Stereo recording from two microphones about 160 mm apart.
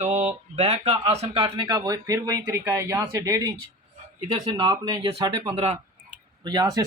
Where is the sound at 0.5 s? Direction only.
40° right (ahead or behind).